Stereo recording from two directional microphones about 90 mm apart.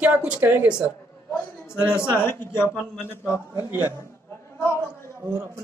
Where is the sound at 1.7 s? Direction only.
25° left (ahead or behind).